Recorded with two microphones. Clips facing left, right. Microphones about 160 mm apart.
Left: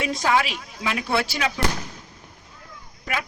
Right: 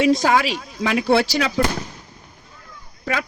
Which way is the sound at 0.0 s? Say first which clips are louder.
Right 6 dB; 35° right (ahead or behind).